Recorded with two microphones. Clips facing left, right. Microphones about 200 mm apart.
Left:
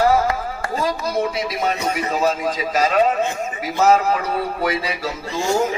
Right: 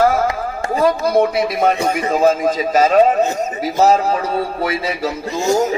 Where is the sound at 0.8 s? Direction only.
55° right (ahead or behind); by 4.2 s 35° right (ahead or behind).